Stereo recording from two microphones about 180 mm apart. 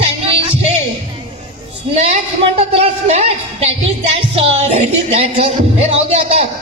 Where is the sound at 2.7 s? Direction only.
35° right (ahead or behind).